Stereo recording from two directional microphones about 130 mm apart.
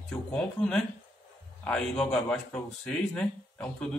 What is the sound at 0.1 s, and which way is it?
A man's voice, 10° left (ahead or behind).